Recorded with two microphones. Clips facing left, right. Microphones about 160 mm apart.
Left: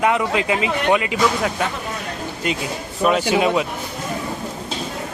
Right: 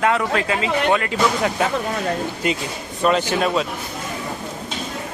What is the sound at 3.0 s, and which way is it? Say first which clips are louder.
Speech: left 1 dB; 5° left (ahead or behind).